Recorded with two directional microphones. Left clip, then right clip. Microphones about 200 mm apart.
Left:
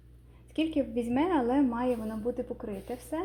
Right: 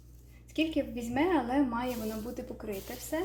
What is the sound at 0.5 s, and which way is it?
A woman's voice, 40° left (ahead or behind).